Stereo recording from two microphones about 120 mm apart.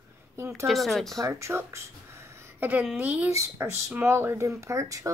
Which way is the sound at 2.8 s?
10° right (ahead or behind).